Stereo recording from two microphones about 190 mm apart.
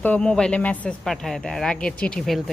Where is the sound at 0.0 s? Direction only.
5° left (ahead or behind).